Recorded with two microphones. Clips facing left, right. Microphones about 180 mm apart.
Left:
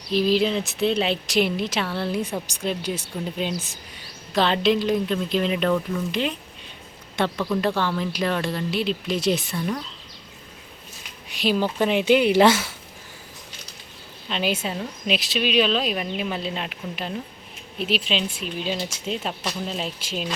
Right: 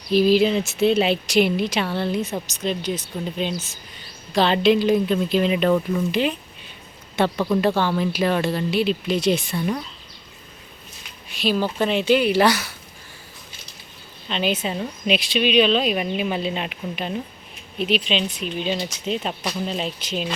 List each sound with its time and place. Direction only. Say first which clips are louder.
0.1 s speech: right 4 dB; 5° right (ahead or behind)
11.3 s a sound: right 1 dB; 15° left (ahead or behind)
11.8 s speech: left 1 dB; 15° left (ahead or behind)
14.3 s speech: right 2 dB; 5° left (ahead or behind)
14.6 s speech: right 3 dB; 5° right (ahead or behind)